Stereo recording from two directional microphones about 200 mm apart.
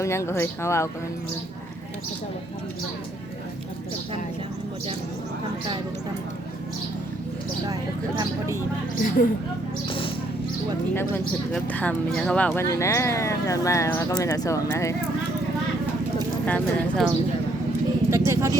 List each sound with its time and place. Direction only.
0.0 s speech: 15° left (ahead or behind)
9.0 s speech: 45° left (ahead or behind)
11.1 s speech: 10° left (ahead or behind)
16.5 s speech: 5° left (ahead or behind)
18.1 s vehicle: 15° right (ahead or behind)